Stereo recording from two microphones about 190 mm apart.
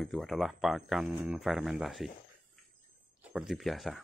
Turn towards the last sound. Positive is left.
turn(degrees=0)  # may be behind; listen again after turning